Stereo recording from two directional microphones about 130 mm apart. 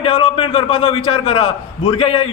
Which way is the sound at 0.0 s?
45° left (ahead or behind).